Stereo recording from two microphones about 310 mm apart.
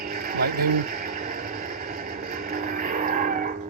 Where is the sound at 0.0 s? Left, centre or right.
Right.